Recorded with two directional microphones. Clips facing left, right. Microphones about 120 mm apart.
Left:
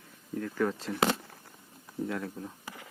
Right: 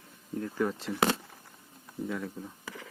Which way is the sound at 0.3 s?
30° right (ahead or behind).